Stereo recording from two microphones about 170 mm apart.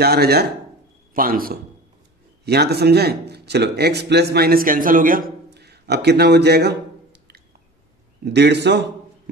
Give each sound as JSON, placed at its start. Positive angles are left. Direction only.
{"t": 0.0, "sound": "speech", "side_deg": -70}
{"t": 1.1, "sound": "a man's voice", "side_deg": -55}
{"t": 2.4, "sound": "speech", "side_deg": -75}
{"t": 5.5, "sound": "a man's voice", "side_deg": -75}
{"t": 8.3, "sound": "a man's voice", "side_deg": -85}